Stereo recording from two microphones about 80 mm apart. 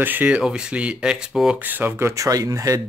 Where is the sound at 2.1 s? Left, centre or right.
Right.